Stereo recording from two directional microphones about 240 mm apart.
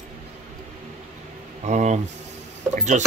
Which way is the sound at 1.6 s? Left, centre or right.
Right.